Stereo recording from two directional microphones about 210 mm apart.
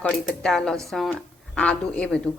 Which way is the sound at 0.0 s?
5° left (ahead or behind).